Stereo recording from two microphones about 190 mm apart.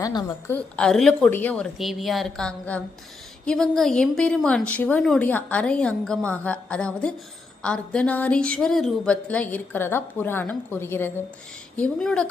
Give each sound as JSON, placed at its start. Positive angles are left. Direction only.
{"t": 0.0, "sound": "a woman's voice", "side_deg": 20}
{"t": 0.5, "sound": "a woman's voice", "side_deg": 5}
{"t": 1.8, "sound": "a woman's voice", "side_deg": 0}